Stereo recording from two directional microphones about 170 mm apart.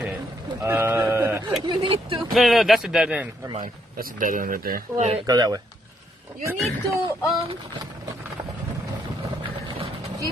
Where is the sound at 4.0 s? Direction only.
50° right (ahead or behind).